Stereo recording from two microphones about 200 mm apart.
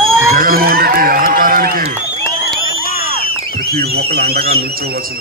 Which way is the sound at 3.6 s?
50° right (ahead or behind).